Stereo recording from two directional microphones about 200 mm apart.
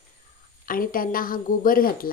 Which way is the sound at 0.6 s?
45° left (ahead or behind).